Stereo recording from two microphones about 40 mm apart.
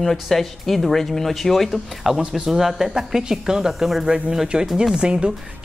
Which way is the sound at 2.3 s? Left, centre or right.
Centre.